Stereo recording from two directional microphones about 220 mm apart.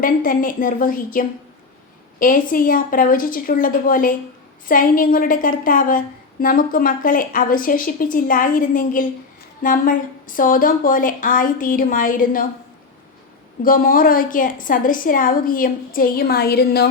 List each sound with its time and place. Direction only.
0.0 s a woman's voice: 40° left (ahead or behind)
13.6 s a woman's voice: 40° left (ahead or behind)